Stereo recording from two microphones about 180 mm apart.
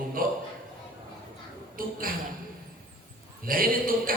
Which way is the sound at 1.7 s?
50° right (ahead or behind).